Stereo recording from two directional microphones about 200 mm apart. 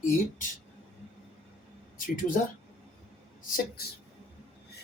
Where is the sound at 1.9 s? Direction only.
40° left (ahead or behind).